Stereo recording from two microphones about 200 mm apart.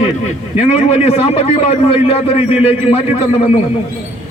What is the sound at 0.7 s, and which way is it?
A man's voice, 30° left (ahead or behind).